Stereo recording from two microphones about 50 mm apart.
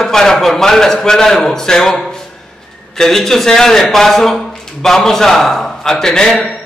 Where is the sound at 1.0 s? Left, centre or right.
Centre.